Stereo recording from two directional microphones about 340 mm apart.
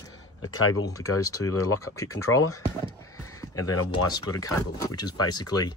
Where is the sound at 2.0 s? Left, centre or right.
Centre.